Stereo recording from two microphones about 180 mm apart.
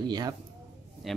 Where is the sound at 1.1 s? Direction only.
Centre (ahead or behind).